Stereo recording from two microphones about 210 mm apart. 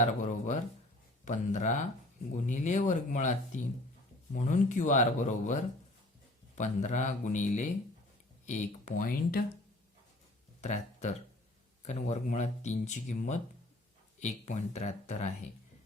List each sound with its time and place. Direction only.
0.0 s speech: 35° left (ahead or behind)
6.6 s speech: 35° left (ahead or behind)
10.6 s a sound: 35° left (ahead or behind)
11.9 s speech: 35° left (ahead or behind)